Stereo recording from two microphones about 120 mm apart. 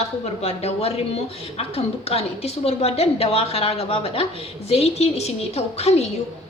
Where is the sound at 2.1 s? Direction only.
60° left (ahead or behind).